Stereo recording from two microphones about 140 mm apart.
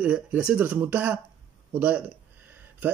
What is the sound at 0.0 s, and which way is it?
A man's voice, 10° right (ahead or behind).